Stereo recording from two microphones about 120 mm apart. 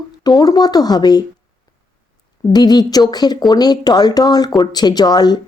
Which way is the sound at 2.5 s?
35° left (ahead or behind).